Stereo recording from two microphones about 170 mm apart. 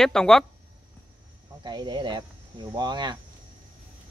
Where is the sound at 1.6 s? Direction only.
25° right (ahead or behind).